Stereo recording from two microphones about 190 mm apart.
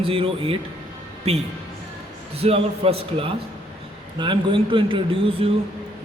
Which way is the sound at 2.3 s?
30° right (ahead or behind).